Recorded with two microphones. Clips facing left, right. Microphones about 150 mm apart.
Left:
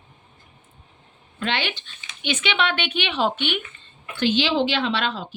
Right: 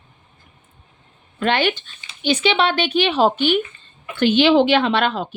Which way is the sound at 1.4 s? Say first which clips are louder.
Right 8 dB; 45° right (ahead or behind).